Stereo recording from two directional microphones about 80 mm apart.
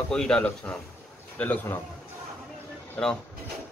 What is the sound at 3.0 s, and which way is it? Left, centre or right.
Speech, centre.